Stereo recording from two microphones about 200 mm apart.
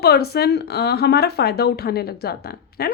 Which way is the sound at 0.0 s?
50° left (ahead or behind).